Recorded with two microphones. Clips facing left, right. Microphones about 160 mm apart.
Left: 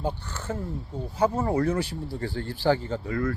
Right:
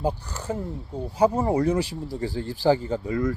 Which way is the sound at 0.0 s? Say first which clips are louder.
Right 4 dB; 40° right (ahead or behind).